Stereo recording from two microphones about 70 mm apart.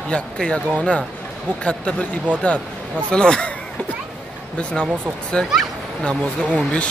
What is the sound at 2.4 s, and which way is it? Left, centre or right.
Speech, left.